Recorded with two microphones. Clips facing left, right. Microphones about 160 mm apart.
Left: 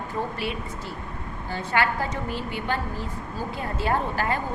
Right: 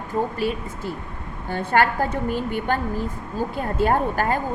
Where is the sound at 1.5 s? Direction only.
50° right (ahead or behind).